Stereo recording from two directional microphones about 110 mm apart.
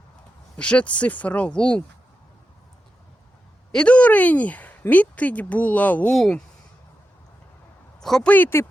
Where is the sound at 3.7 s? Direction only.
10° left (ahead or behind).